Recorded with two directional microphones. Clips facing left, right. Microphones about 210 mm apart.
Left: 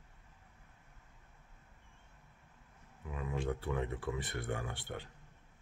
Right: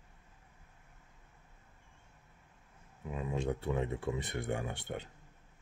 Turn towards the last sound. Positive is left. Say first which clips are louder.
# right 3 dB
turn(degrees=-20)  # may be behind; listen again after turning